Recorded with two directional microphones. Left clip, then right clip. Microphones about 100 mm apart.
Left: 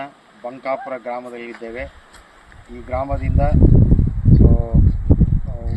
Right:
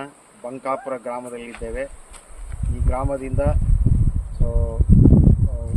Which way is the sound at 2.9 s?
50° right (ahead or behind).